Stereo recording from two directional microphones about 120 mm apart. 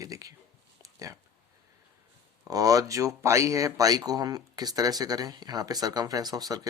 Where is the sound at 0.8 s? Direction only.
25° right (ahead or behind).